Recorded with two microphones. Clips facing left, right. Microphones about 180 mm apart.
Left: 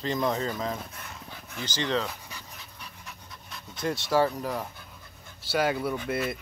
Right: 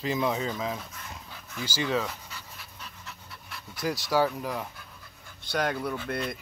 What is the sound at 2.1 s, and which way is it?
Pant, 15° left (ahead or behind).